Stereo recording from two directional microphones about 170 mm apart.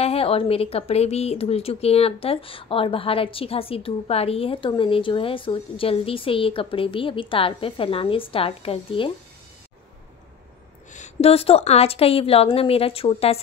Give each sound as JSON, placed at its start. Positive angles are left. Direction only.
{"t": 0.0, "sound": "speech", "side_deg": 35}
{"t": 10.9, "sound": "speech", "side_deg": 40}